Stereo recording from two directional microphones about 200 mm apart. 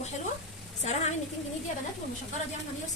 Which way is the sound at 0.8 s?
35° left (ahead or behind).